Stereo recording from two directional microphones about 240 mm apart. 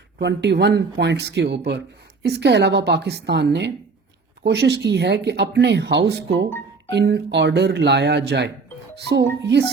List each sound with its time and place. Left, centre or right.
0.2 s speech: right